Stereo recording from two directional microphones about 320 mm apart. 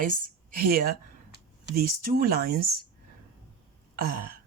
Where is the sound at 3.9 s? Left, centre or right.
Right.